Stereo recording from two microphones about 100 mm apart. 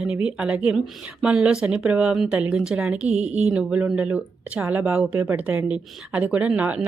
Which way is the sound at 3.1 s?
90° right.